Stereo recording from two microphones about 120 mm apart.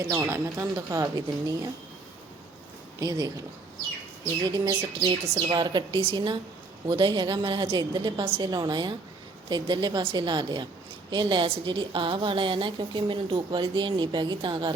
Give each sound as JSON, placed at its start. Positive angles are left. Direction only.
{"t": 0.0, "sound": "speech", "side_deg": -25}
{"t": 3.0, "sound": "a woman's voice", "side_deg": -30}
{"t": 4.4, "sound": "a woman's voice", "side_deg": -35}
{"t": 4.8, "sound": "a woman's voice", "side_deg": -45}